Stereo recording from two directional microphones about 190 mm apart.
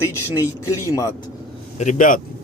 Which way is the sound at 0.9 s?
20° left (ahead or behind).